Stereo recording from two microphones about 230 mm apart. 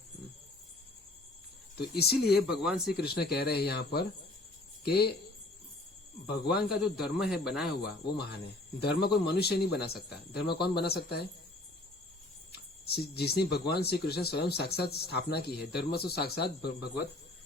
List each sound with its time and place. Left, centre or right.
2.0 s speech: left
2.5 s speech: centre
3.0 s speech: left
6.2 s speech: left
6.7 s speech: centre
8.0 s speech: left
12.5 s speech: left